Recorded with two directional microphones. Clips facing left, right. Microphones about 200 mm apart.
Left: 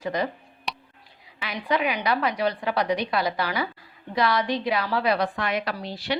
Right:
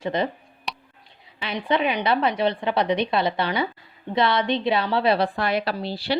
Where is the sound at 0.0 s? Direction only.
25° right (ahead or behind).